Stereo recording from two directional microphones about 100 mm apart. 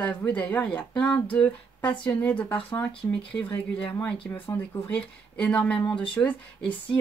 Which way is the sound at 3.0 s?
25° left (ahead or behind).